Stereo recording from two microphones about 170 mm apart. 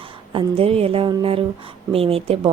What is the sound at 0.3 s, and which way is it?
A woman's voice, 35° right (ahead or behind).